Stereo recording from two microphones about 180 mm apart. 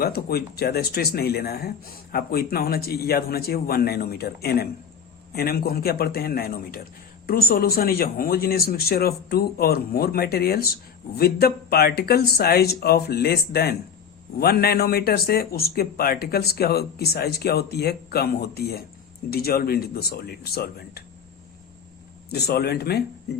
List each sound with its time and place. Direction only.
0.0 s speech: 60° left (ahead or behind)
22.3 s speech: 60° left (ahead or behind)